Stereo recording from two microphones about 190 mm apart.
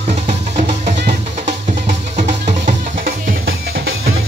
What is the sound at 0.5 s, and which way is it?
Music, 40° right (ahead or behind).